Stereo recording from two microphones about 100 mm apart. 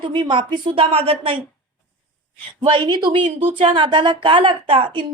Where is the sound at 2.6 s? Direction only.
55° right (ahead or behind).